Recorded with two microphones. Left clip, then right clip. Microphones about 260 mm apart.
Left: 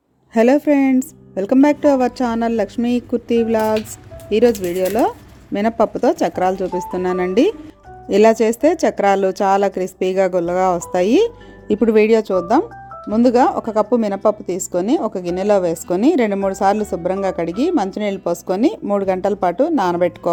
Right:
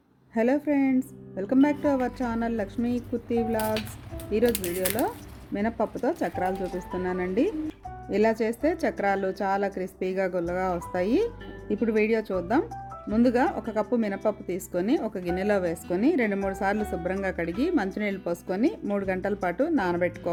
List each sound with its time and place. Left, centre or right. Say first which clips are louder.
0.3 s a woman's voice: left 11 dB; left
5.5 s a woman's voice: left 11 dB; left